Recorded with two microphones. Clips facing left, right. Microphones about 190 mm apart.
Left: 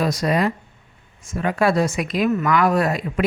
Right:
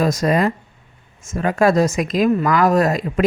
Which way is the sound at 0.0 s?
45° right (ahead or behind).